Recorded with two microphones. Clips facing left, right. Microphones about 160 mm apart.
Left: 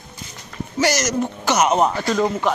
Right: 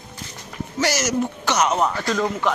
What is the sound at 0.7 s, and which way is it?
Speech, 5° right (ahead or behind).